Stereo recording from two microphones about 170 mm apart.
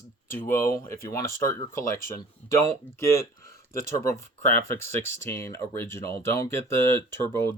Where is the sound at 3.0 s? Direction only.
15° left (ahead or behind).